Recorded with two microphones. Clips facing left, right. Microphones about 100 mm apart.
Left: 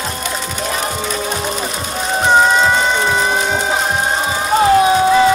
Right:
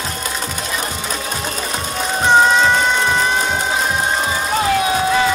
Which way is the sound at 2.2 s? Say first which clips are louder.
Even; 5° left (ahead or behind).